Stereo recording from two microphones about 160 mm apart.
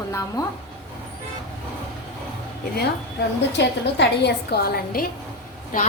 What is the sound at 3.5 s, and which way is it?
A woman's voice, 90° left.